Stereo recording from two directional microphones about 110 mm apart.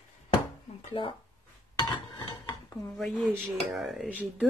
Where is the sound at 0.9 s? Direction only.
50° left (ahead or behind).